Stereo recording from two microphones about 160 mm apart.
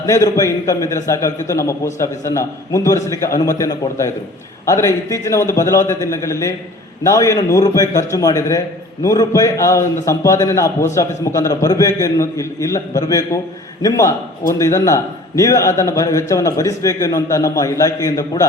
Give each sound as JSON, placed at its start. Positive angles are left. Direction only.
{"t": 0.0, "sound": "a man's voice", "side_deg": 20}